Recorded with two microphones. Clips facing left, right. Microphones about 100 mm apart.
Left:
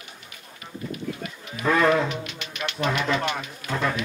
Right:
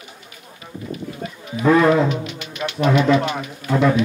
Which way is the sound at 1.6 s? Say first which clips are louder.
Right 6 dB; 10° right (ahead or behind).